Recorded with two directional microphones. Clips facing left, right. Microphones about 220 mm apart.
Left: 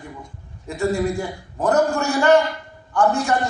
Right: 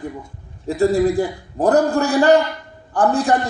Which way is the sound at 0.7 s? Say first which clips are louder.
Right 6 dB; 35° right (ahead or behind).